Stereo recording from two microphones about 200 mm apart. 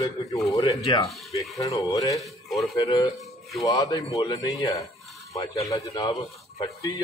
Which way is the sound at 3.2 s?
Centre (ahead or behind).